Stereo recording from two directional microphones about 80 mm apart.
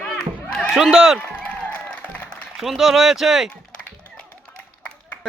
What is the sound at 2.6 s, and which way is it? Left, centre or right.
Speech, centre.